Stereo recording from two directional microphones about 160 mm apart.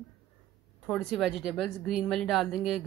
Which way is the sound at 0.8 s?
Centre (ahead or behind).